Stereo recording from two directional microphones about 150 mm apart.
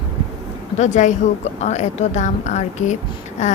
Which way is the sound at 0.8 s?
55° left (ahead or behind).